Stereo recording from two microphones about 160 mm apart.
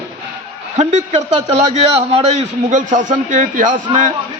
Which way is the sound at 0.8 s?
45° right (ahead or behind).